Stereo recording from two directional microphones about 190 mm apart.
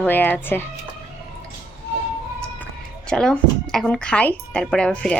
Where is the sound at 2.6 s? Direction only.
5° left (ahead or behind).